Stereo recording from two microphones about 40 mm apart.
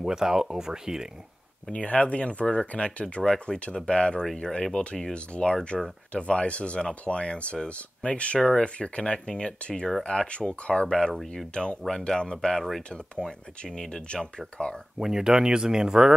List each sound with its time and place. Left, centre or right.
0.0 s speech: centre
1.7 s speech: left
4.7 s speech: centre
5.1 s speech: left
15.0 s speech: centre